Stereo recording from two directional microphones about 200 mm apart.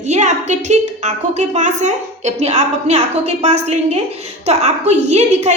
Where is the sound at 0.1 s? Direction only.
35° right (ahead or behind).